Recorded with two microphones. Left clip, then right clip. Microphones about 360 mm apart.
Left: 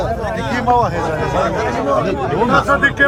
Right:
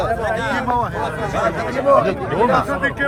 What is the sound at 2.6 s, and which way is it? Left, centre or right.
Speech, left.